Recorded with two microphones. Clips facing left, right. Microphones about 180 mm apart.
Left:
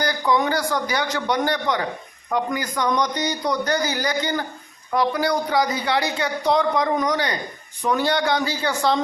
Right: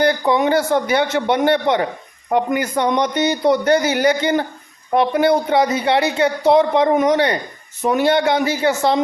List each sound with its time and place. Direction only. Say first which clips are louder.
0.0 s a man's voice: right 5 dB; 25° right (ahead or behind)